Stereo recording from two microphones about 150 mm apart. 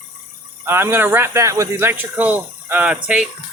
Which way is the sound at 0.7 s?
15° right (ahead or behind).